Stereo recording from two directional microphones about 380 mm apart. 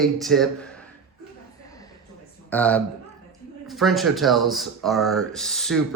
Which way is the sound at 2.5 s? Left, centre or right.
Centre.